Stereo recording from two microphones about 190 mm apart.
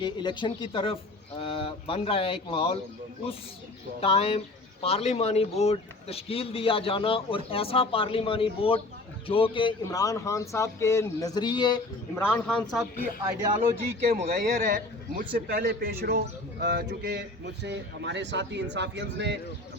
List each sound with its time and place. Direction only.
0.0 s speech: 25° left (ahead or behind)
4.0 s speech: 30° left (ahead or behind)
12.2 s speech: 10° left (ahead or behind)
13.2 s speech: 15° right (ahead or behind)
14.3 s a man's voice: 50° right (ahead or behind); by 19.4 s 65° right (ahead or behind)